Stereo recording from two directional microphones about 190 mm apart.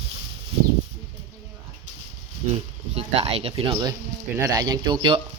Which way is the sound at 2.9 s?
30° right (ahead or behind).